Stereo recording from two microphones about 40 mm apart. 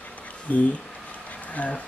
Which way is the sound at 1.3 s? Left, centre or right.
Left.